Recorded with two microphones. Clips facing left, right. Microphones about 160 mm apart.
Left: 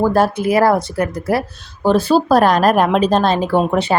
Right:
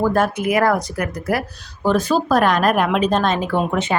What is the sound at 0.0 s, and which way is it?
Speech, 30° left (ahead or behind).